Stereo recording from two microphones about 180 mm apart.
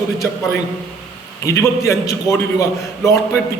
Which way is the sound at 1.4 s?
15° left (ahead or behind).